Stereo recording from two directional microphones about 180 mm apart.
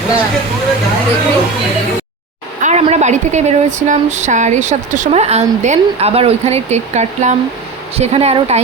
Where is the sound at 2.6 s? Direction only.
40° right (ahead or behind).